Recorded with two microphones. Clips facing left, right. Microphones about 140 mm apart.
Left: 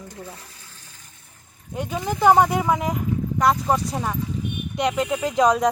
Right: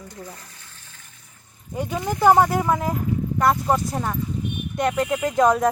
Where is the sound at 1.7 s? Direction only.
5° right (ahead or behind).